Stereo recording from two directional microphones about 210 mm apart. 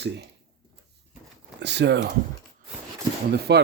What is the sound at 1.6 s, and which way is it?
Speech, 55° right (ahead or behind).